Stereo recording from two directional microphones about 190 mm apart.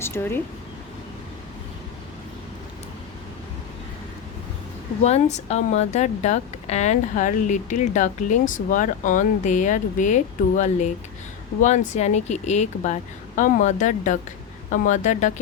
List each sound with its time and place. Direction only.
0.0 s speech: 10° left (ahead or behind)
5.0 s speech: 35° left (ahead or behind)